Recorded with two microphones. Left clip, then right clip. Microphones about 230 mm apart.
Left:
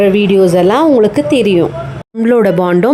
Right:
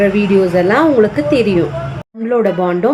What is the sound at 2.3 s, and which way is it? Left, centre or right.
Speech, left.